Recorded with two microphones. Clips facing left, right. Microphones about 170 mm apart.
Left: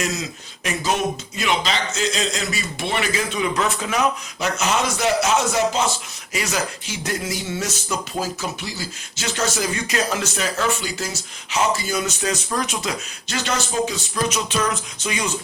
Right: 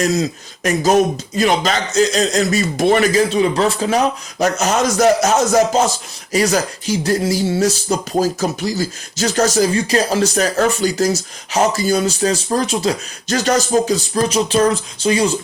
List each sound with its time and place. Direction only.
0.0 s speech: 40° right (ahead or behind)